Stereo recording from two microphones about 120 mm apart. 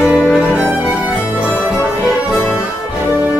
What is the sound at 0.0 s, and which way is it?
Music, 20° left (ahead or behind).